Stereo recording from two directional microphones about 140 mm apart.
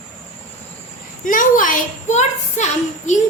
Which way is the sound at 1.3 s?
75° left (ahead or behind).